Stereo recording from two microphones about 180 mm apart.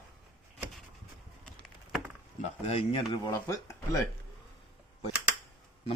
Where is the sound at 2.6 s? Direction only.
30° left (ahead or behind).